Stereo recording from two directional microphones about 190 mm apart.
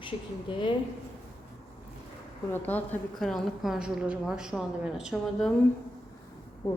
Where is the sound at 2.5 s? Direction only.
10° left (ahead or behind).